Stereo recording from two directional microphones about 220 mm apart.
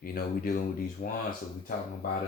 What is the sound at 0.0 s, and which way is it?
Speech, 40° left (ahead or behind).